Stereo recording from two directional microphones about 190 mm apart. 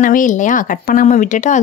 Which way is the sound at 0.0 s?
45° left (ahead or behind).